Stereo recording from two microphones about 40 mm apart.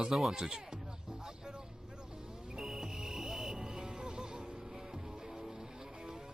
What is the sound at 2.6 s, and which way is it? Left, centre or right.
Music, centre.